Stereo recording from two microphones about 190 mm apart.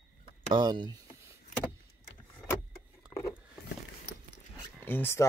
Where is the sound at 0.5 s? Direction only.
25° right (ahead or behind).